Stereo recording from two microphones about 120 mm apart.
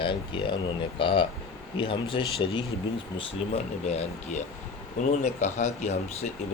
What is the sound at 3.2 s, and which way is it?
Speech, 65° left (ahead or behind).